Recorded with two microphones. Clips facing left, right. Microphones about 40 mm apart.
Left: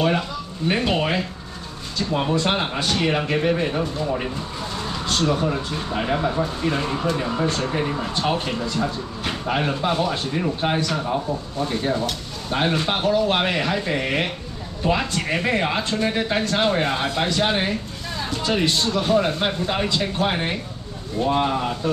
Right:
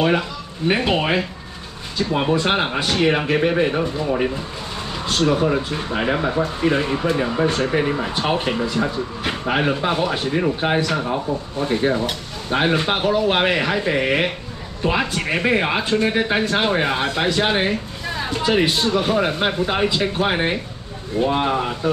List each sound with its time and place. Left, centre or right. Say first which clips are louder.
0.7 s speech: right 3 dB; centre